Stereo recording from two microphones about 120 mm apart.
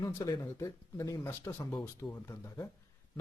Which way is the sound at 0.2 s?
25° left (ahead or behind).